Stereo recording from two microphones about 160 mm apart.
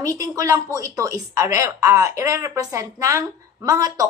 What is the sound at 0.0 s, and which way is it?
A woman's voice, 20° right (ahead or behind).